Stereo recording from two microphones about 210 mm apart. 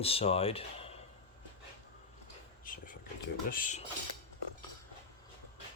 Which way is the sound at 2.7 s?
40° left (ahead or behind).